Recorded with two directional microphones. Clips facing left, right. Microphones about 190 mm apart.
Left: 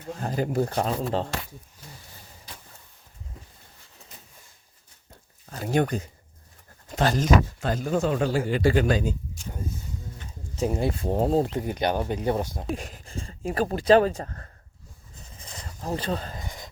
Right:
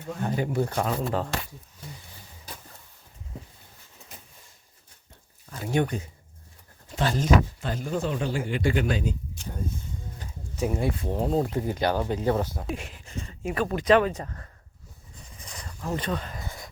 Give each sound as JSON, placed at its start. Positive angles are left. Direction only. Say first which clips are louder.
{"t": 0.1, "sound": "speech", "louder": "left 1 dB", "side_deg": 35}
{"t": 5.5, "sound": "speech", "louder": "left 2 dB", "side_deg": 40}
{"t": 10.6, "sound": "speech", "louder": "left 1 dB", "side_deg": 30}
{"t": 11.7, "sound": "speech", "louder": "even", "side_deg": 20}
{"t": 12.7, "sound": "speech", "louder": "left 2 dB", "side_deg": 40}
{"t": 15.4, "sound": "a sound", "louder": "even", "side_deg": 25}
{"t": 16.4, "sound": "a sound", "louder": "even", "side_deg": 20}